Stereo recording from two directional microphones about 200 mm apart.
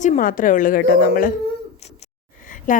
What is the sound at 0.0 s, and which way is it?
A woman's voice, 40° left (ahead or behind).